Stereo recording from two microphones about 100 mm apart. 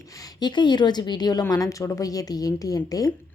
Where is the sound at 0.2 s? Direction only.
45° left (ahead or behind).